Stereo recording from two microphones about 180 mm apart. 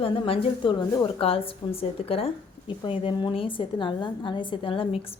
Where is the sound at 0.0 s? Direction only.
30° left (ahead or behind).